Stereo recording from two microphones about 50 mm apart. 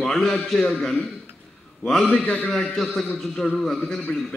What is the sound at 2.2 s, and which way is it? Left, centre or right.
Speech, left.